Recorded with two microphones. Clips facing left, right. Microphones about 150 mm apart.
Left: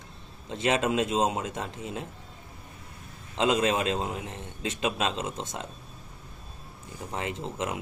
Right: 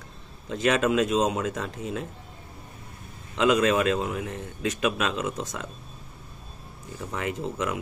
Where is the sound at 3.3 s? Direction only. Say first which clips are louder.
Right 3 dB; 25° left (ahead or behind).